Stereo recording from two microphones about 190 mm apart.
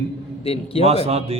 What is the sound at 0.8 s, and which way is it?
Speech, 30° right (ahead or behind).